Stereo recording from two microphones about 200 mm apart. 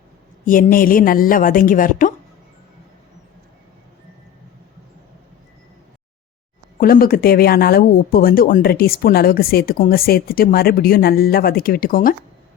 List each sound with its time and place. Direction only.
0.4 s speech: 45° left (ahead or behind)
6.7 s speech: 45° left (ahead or behind)